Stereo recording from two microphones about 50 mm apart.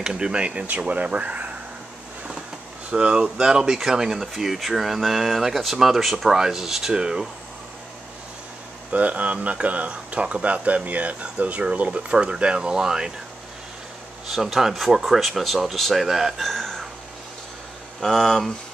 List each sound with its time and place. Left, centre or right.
0.0 s speech: centre
2.9 s speech: centre
8.9 s speech: right
14.2 s speech: centre
18.0 s speech: centre